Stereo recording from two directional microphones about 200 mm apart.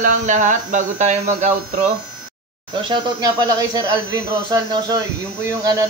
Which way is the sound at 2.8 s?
20° right (ahead or behind).